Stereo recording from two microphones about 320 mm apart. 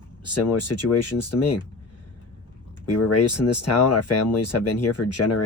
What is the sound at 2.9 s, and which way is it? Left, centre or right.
Speech, left.